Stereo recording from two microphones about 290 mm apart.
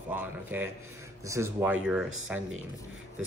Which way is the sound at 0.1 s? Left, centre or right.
Centre.